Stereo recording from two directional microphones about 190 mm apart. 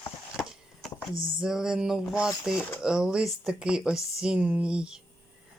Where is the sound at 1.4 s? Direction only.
5° right (ahead or behind).